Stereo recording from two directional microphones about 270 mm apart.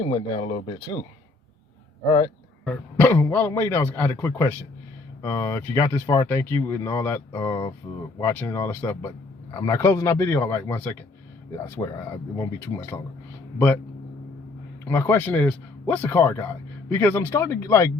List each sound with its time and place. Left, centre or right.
0.0 s speech: centre
2.6 s speech: centre
14.8 s speech: centre